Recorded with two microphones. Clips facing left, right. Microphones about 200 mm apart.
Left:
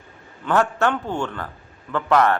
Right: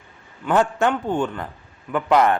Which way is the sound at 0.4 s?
15° right (ahead or behind).